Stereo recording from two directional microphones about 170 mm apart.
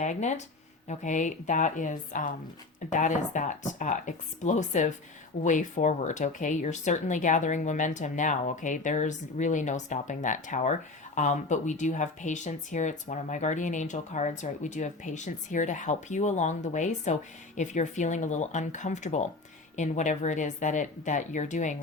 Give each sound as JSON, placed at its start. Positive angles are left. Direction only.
{"t": 0.0, "sound": "speech", "side_deg": 45}